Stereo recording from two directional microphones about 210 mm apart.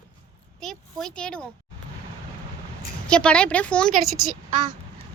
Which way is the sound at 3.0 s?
5° left (ahead or behind).